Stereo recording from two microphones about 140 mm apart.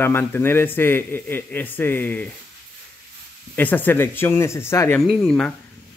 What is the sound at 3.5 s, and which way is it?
A man's voice, 15° left (ahead or behind).